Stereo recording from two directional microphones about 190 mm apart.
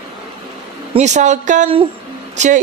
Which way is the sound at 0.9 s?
40° right (ahead or behind).